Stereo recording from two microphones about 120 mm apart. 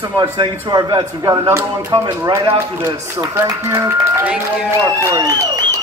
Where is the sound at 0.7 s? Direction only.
35° right (ahead or behind).